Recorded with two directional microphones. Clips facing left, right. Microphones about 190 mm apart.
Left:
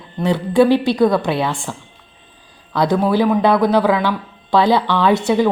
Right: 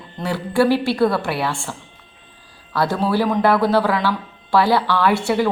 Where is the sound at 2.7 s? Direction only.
15° left (ahead or behind).